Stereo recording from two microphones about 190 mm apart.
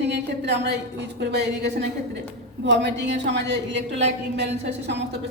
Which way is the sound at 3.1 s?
65° right (ahead or behind).